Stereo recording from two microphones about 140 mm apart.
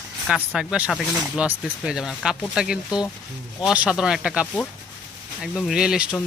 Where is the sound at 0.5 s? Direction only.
5° right (ahead or behind).